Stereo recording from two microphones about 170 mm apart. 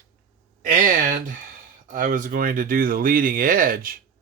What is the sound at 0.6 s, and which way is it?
Speech, 50° right (ahead or behind).